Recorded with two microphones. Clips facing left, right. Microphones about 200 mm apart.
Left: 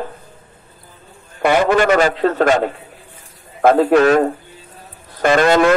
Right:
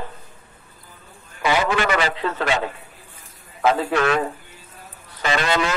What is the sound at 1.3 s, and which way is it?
A man's voice, 50° left (ahead or behind).